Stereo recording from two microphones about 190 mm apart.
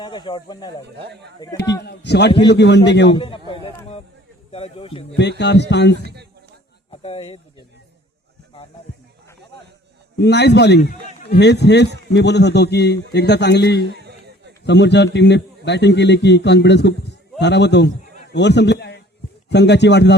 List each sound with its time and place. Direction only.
0.0 s a man's voice: 25° left (ahead or behind)
1.0 s speech: 65° right (ahead or behind)
1.8 s a man's voice: 60° left (ahead or behind)
3.1 s a man's voice: 25° left (ahead or behind)
5.4 s a man's voice: 65° left (ahead or behind)
6.9 s speech: 30° left (ahead or behind)
10.2 s a man's voice: 60° left (ahead or behind)
13.9 s a sound: 60° right (ahead or behind)
14.6 s a man's voice: 65° left (ahead or behind)